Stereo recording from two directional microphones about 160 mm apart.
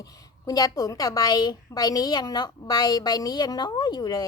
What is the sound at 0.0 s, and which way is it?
A woman's voice, 20° left (ahead or behind).